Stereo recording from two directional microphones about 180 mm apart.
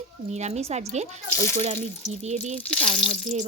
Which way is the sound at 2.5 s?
5° left (ahead or behind).